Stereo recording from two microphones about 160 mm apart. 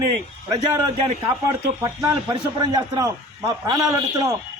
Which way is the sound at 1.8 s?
20° right (ahead or behind).